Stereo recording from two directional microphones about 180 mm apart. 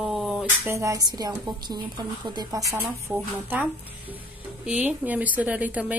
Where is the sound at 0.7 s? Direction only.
15° right (ahead or behind).